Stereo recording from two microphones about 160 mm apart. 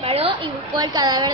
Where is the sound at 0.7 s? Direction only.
25° right (ahead or behind).